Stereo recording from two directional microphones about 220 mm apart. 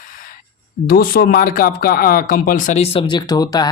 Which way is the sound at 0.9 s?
40° left (ahead or behind).